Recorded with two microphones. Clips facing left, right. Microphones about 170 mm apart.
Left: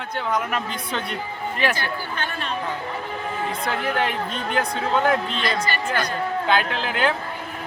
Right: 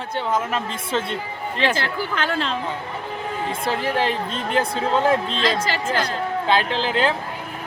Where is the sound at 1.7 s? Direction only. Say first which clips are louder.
Right 3 dB; 90° right.